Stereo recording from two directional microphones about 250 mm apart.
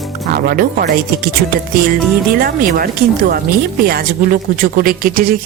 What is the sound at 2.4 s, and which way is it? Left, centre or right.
Speech, right.